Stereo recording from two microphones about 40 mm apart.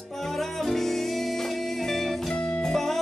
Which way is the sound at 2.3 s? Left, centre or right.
Left.